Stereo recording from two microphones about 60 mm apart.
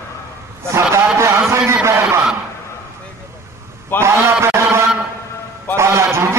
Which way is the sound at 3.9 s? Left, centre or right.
Right.